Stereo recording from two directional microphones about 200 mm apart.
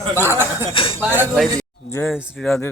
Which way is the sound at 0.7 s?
25° left (ahead or behind).